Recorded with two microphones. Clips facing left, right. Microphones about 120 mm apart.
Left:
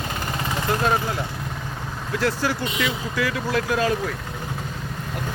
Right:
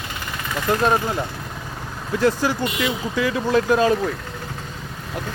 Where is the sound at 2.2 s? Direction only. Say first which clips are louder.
Right 4 dB; 20° right (ahead or behind).